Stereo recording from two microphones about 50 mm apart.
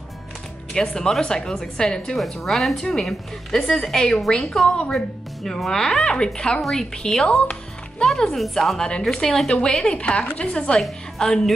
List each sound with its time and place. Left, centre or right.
0.7 s speech: centre
2.1 s speech: centre
4.9 s a woman's voice: centre